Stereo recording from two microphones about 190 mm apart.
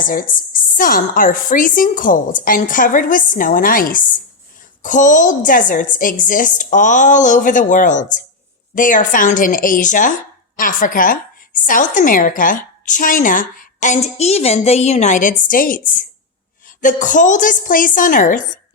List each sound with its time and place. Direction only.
0.1 s a woman's voice: 45° left (ahead or behind)